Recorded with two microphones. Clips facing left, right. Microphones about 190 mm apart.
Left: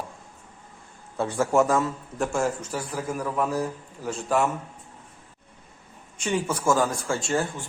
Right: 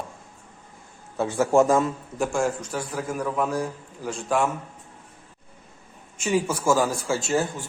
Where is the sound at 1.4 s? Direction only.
25° right (ahead or behind).